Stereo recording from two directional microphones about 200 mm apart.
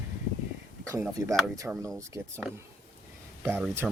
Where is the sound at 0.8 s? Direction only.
15° right (ahead or behind).